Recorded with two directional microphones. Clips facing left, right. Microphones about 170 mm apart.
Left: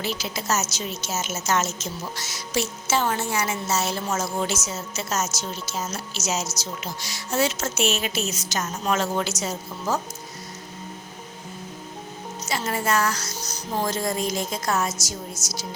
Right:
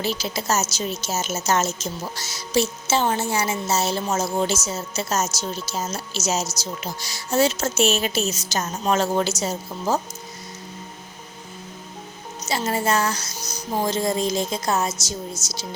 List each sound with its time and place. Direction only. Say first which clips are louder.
0.0 s speech: right 3 dB; 35° right (ahead or behind)
12.5 s speech: right 3 dB; 25° right (ahead or behind)
13.3 s speech: right 2 dB; 10° right (ahead or behind)